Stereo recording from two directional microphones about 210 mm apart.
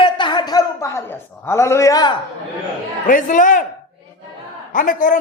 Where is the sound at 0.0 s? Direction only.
20° left (ahead or behind).